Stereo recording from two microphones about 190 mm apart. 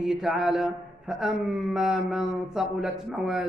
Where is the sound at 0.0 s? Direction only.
5° right (ahead or behind).